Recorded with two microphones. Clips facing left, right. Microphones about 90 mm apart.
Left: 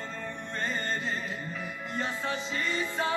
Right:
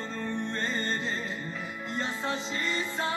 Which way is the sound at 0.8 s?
25° right (ahead or behind).